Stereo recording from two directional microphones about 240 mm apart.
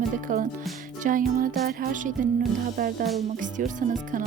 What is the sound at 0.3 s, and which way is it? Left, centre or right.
Music, right.